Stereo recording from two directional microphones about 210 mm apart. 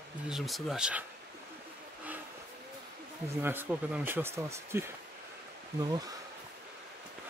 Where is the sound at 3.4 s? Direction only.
10° right (ahead or behind).